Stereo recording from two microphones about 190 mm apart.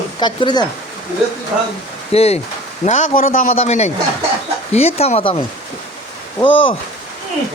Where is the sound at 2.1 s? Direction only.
35° left (ahead or behind).